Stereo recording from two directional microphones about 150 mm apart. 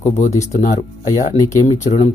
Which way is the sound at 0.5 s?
50° left (ahead or behind).